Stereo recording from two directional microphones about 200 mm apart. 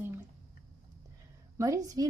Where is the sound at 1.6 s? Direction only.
15° right (ahead or behind).